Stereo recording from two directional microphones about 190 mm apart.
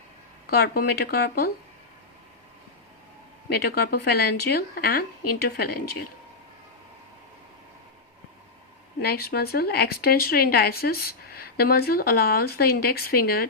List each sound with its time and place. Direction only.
0.4 s speech: 55° left (ahead or behind)
3.5 s speech: 55° left (ahead or behind)
9.0 s speech: 55° left (ahead or behind)